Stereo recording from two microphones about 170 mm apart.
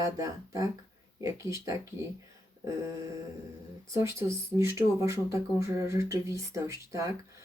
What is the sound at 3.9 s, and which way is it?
Speech, 15° right (ahead or behind).